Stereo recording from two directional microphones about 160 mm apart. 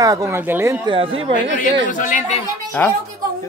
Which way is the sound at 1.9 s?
55° left (ahead or behind).